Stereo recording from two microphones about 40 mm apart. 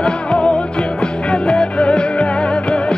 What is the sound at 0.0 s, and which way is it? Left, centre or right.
Music, left.